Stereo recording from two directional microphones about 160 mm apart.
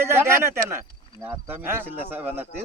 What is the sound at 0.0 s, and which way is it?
Speech, 15° right (ahead or behind).